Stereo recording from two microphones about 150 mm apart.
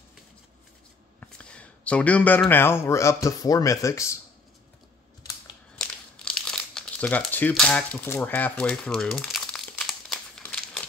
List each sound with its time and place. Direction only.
1.2 s speech: 10° left (ahead or behind)
5.8 s crumpling: 5° left (ahead or behind)